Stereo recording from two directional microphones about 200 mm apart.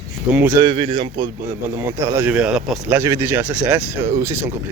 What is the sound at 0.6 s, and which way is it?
Speech, 25° right (ahead or behind).